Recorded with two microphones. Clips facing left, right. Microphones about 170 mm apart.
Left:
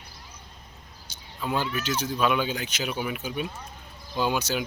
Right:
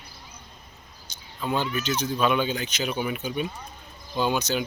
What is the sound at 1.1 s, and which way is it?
Cricket, 5° left (ahead or behind).